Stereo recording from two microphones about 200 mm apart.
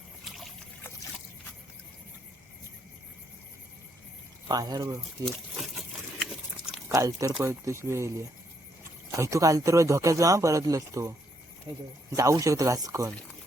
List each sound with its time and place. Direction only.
0.3 s boat: centre (ahead or behind)
4.4 s speech: 20° right (ahead or behind)
5.2 s a sound: centre (ahead or behind)
6.8 s speech: 15° right (ahead or behind)
12.1 s speech: 15° right (ahead or behind)